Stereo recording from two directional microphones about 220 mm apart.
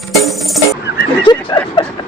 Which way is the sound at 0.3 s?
Centre (ahead or behind).